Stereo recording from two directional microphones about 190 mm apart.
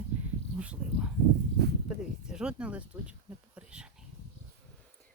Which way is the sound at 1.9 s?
5° right (ahead or behind).